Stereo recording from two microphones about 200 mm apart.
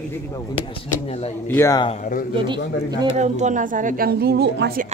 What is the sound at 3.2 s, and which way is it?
A woman's voice, 35° right (ahead or behind).